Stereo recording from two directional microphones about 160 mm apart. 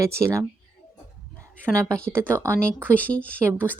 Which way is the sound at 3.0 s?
10° left (ahead or behind).